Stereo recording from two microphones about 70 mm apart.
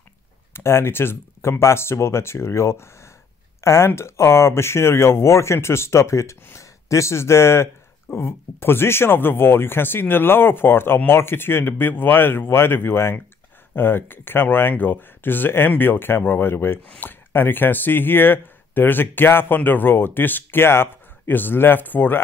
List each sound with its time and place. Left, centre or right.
0.5 s speech: left